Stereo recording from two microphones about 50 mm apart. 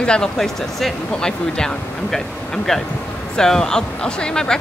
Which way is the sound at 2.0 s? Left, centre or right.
Centre.